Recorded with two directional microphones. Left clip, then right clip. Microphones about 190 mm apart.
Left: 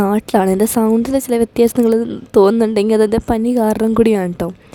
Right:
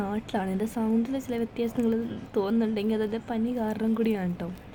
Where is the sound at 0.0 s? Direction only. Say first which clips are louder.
Left 16 dB; 45° left (ahead or behind).